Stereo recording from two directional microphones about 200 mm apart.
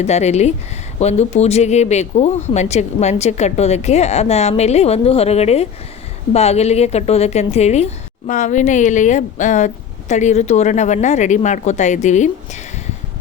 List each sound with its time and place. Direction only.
0.0 s a woman's voice: 35° left (ahead or behind)